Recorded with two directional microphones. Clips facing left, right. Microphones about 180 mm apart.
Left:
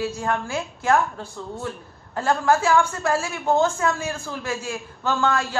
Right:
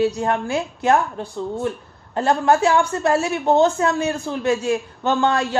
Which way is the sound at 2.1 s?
20° right (ahead or behind).